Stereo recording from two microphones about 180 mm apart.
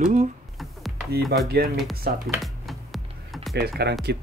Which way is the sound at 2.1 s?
60° right (ahead or behind).